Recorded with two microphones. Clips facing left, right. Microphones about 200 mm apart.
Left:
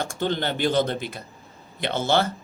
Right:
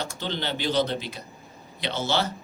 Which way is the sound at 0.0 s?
50° left (ahead or behind).